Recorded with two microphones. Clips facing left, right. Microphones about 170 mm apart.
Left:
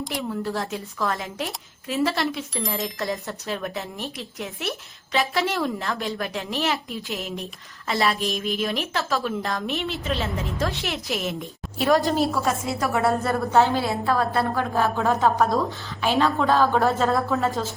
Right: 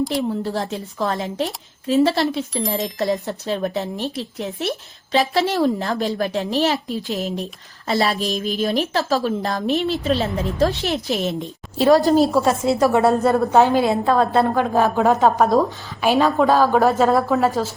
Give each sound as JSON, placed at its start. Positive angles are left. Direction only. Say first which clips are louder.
{"t": 0.1, "sound": "a woman's voice", "louder": "right 5 dB", "side_deg": -30}
{"t": 2.5, "sound": "speech", "louder": "right 5 dB", "side_deg": 0}
{"t": 3.2, "sound": "a woman's voice", "louder": "right 6 dB", "side_deg": -30}
{"t": 3.9, "sound": "speech", "louder": "right 7 dB", "side_deg": 0}
{"t": 4.4, "sound": "a woman's voice", "louder": "right 3 dB", "side_deg": -30}